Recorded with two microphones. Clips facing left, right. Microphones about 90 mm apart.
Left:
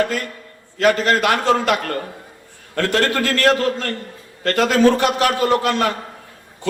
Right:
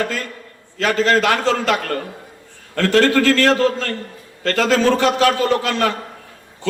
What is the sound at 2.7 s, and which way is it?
A man's voice, 15° left (ahead or behind).